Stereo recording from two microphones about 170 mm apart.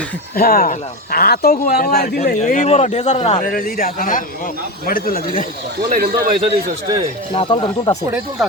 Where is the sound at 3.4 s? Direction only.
55° left (ahead or behind).